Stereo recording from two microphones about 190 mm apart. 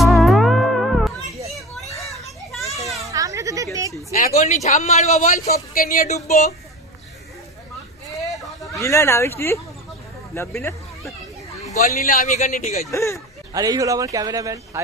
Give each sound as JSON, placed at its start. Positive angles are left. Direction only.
{"t": 0.0, "sound": "music", "side_deg": 0}
{"t": 1.9, "sound": "children playing", "side_deg": 15}
{"t": 2.5, "sound": "children playing", "side_deg": 0}
{"t": 3.0, "sound": "a sound", "side_deg": -15}
{"t": 4.4, "sound": "a man's voice", "side_deg": 40}
{"t": 8.7, "sound": "speech", "side_deg": 15}
{"t": 11.8, "sound": "a man's voice", "side_deg": 45}
{"t": 12.9, "sound": "speech", "side_deg": 15}
{"t": 13.5, "sound": "speech", "side_deg": -20}